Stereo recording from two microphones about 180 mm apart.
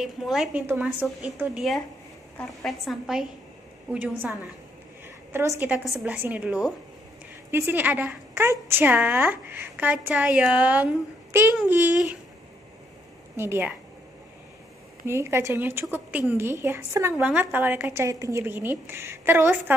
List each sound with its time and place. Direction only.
0.0 s a woman's voice: centre (ahead or behind)
5.0 s a sound: 15° right (ahead or behind)
5.9 s a woman's voice: 5° right (ahead or behind)
13.4 s a woman's voice: 10° right (ahead or behind)
15.0 s a woman's voice: 15° right (ahead or behind)